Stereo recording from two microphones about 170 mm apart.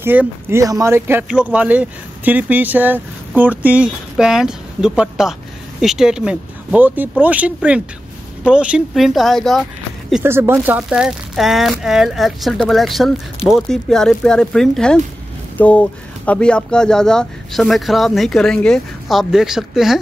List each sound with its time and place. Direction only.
0.0 s speech: 10° right (ahead or behind)
10.2 s speech: 15° right (ahead or behind)